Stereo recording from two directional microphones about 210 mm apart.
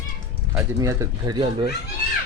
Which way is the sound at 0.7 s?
15° right (ahead or behind).